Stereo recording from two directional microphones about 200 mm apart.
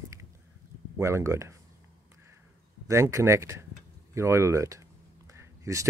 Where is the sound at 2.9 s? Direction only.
15° right (ahead or behind).